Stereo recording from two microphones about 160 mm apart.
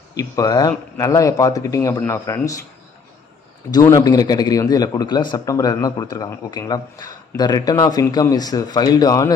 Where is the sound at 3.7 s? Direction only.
25° left (ahead or behind).